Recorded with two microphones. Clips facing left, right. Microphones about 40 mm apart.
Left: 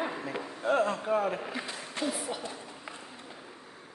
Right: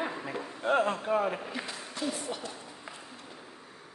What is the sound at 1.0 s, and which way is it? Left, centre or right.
Speech, centre.